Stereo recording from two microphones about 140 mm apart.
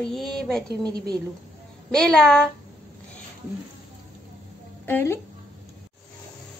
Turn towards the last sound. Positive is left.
turn(degrees=15)  # may be behind; listen again after turning